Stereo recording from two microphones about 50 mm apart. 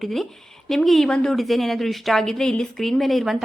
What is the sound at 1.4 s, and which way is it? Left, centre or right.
A woman's voice, centre.